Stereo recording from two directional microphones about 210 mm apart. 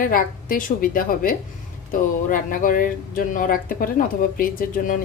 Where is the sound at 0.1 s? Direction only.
40° left (ahead or behind).